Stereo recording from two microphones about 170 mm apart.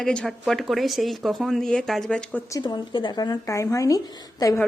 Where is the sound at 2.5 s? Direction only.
25° left (ahead or behind).